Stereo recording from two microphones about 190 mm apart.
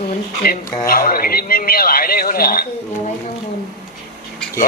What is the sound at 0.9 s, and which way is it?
A man's voice, 50° left (ahead or behind).